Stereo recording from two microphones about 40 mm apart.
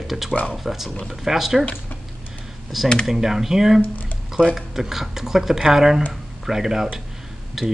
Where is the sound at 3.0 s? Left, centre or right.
Centre.